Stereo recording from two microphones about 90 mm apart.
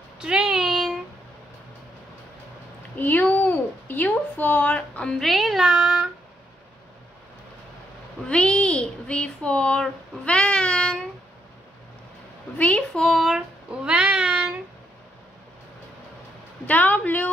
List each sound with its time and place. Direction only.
0.2 s a sound: 10° right (ahead or behind)
3.0 s speech: 20° left (ahead or behind)
5.2 s speech: centre (ahead or behind)
8.3 s a child's voice: 10° left (ahead or behind)
12.5 s a woman's voice: 15° left (ahead or behind)
13.1 s child singing: 5° right (ahead or behind)
16.6 s speech: 20° left (ahead or behind)